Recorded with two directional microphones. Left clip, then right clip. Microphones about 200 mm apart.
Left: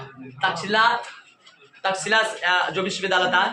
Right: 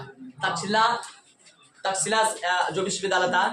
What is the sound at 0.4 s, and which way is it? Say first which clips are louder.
A man's voice: left 3 dB; 15° left (ahead or behind).